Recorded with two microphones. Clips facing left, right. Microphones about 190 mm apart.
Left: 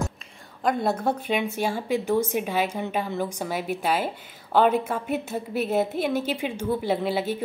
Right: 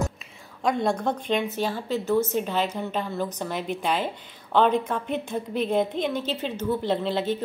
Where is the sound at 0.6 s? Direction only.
5° left (ahead or behind).